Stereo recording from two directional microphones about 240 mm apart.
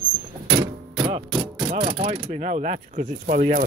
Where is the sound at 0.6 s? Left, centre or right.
Centre.